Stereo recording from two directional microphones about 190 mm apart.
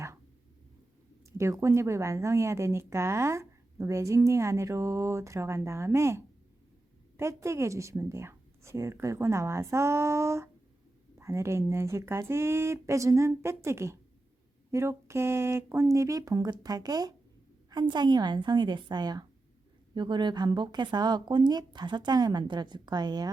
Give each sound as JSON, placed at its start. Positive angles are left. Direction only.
{"t": 1.4, "sound": "a woman's voice", "side_deg": -15}